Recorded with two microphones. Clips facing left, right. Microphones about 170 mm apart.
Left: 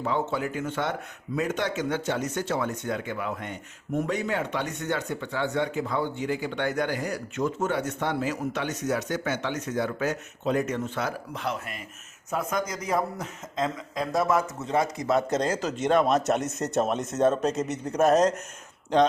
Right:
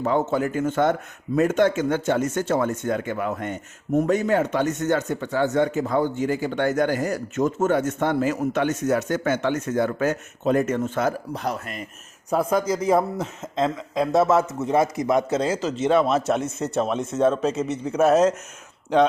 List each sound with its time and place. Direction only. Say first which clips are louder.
0.0 s a man's voice: right 6 dB; 45° right (ahead or behind); by 15.2 s 20° right (ahead or behind)
15.3 s a man's voice: right 3 dB; 5° right (ahead or behind)